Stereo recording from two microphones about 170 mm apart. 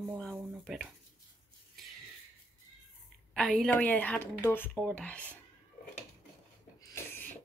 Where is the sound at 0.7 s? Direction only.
Centre (ahead or behind).